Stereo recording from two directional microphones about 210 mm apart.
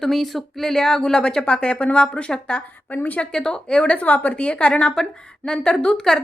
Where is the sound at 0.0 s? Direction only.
Centre (ahead or behind).